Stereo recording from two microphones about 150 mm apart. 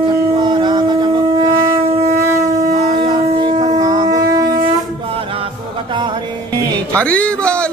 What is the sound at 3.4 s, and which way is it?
Shofar, 25° right (ahead or behind).